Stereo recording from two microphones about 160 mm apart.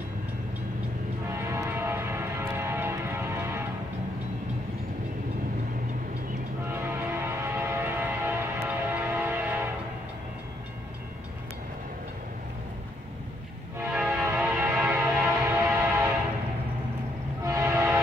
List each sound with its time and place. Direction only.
1.5 s a sound: 15° right (ahead or behind)
6.7 s train: 15° right (ahead or behind)
13.7 s train: 10° right (ahead or behind)
17.4 s train: 20° right (ahead or behind)